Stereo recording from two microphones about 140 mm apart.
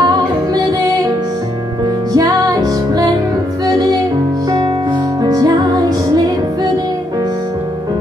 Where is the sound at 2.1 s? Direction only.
25° right (ahead or behind).